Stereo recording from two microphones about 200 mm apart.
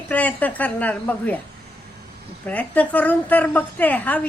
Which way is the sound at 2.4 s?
5° left (ahead or behind).